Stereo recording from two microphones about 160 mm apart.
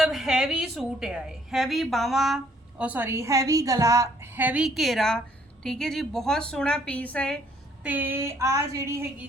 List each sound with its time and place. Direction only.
0.0 s a woman's voice: 5° right (ahead or behind)
7.9 s speech: 10° right (ahead or behind)